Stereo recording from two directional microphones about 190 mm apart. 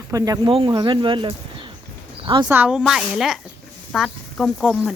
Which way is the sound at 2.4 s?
10° right (ahead or behind).